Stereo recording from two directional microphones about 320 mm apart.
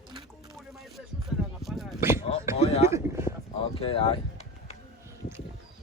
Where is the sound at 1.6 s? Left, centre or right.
Centre.